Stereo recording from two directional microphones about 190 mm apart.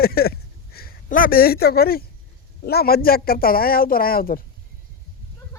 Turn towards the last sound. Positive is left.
turn(degrees=50)  # may be behind; listen again after turning